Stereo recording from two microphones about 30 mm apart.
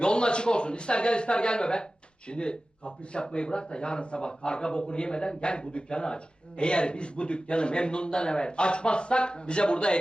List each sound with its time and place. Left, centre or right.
0.0 s speech: left